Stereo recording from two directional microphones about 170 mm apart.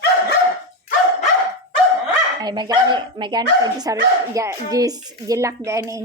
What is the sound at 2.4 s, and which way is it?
A woman's voice, 25° right (ahead or behind).